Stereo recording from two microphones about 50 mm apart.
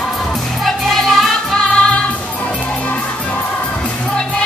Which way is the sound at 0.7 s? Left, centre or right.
Centre.